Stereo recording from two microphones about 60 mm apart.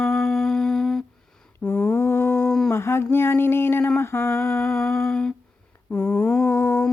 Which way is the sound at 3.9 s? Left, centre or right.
Left.